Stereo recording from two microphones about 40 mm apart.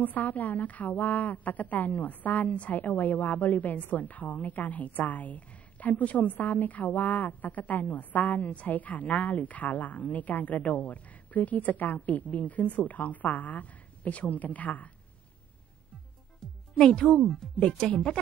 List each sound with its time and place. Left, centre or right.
0.0 s a woman's voice: left
16.8 s speech: left
17.2 s speech: centre
17.6 s speech: left